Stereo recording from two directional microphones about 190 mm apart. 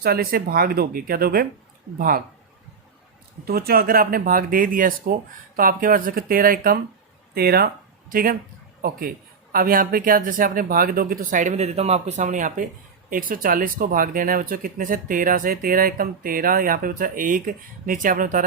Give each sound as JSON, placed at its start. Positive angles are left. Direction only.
{"t": 0.0, "sound": "speech", "side_deg": -55}
{"t": 3.4, "sound": "speech", "side_deg": -55}